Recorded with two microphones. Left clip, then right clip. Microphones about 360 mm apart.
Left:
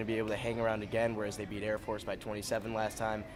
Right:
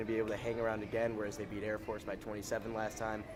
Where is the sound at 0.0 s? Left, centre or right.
Left.